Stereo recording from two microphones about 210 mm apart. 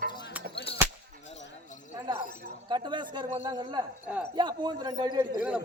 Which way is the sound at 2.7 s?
20° right (ahead or behind).